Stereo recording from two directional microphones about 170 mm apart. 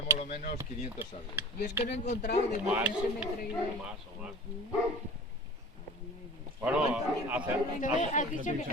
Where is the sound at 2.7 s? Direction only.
10° right (ahead or behind).